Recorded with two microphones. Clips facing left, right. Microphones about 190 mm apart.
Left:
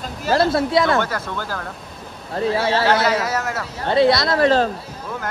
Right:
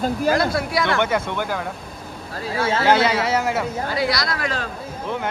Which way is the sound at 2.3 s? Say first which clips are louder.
Left 4 dB; 30° left (ahead or behind).